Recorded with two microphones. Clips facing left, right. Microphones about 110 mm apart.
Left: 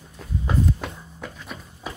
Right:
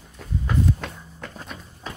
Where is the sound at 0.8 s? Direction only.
10° left (ahead or behind).